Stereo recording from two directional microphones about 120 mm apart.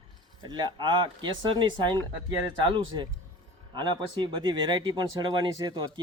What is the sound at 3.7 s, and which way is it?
Speech, 40° right (ahead or behind).